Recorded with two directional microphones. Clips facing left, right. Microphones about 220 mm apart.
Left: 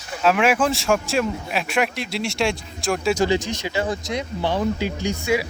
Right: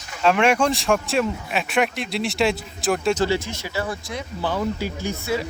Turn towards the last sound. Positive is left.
turn(degrees=15)  # may be behind; listen again after turning